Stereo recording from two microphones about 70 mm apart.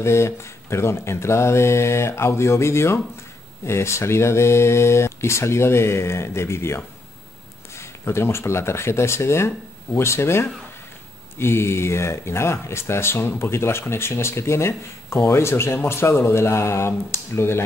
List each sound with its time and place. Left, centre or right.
0.0 s speech: left